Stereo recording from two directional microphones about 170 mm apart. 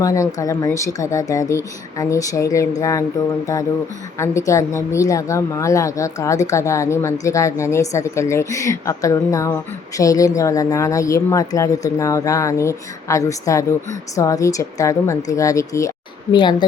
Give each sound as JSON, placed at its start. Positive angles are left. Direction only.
{"t": 0.0, "sound": "a woman's voice", "side_deg": 20}
{"t": 4.2, "sound": "a woman's voice", "side_deg": 15}